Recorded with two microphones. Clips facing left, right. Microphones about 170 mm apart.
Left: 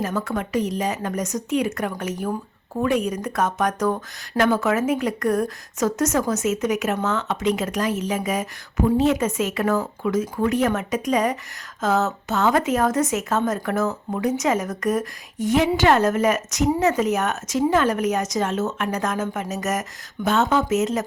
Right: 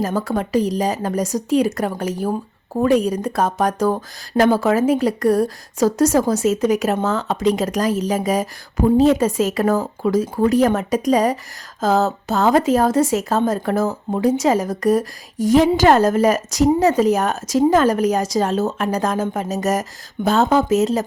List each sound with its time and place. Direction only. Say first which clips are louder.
0.0 s speech: right 4 dB; 35° right (ahead or behind)